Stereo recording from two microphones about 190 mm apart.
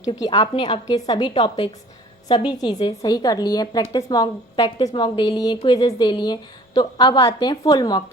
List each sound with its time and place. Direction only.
0.1 s a woman's voice: 20° left (ahead or behind)